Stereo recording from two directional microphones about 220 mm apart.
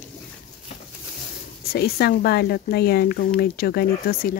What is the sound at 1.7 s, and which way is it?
Speech, 45° left (ahead or behind).